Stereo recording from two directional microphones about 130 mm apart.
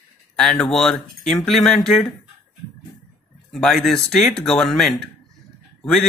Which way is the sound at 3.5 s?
Centre (ahead or behind).